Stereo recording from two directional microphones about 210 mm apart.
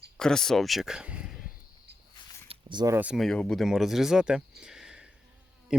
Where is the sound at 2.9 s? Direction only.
5° right (ahead or behind).